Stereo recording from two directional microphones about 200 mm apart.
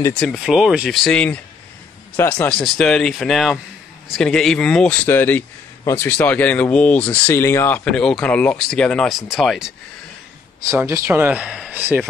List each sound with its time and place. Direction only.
0.2 s speech: centre (ahead or behind)
10.6 s speech: 15° right (ahead or behind)